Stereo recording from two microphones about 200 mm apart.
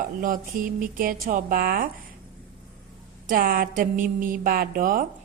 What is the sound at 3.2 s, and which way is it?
A woman's voice, 45° right (ahead or behind).